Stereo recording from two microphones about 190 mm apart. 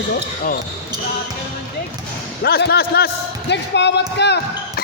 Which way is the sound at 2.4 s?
55° left (ahead or behind).